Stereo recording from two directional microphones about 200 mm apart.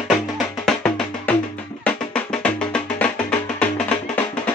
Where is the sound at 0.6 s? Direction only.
5° left (ahead or behind).